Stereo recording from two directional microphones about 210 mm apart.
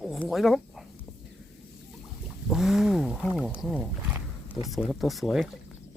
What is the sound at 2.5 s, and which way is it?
Wild animals, centre (ahead or behind).